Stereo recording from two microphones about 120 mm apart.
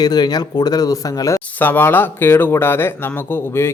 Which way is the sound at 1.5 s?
15° left (ahead or behind).